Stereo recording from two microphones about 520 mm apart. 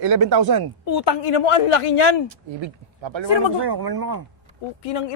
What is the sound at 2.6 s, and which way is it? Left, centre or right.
Speech, right.